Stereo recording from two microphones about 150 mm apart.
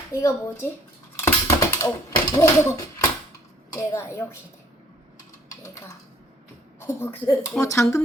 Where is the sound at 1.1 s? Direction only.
20° left (ahead or behind).